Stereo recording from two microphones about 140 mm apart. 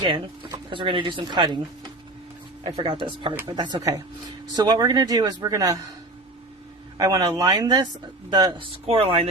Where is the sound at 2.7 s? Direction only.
35° right (ahead or behind).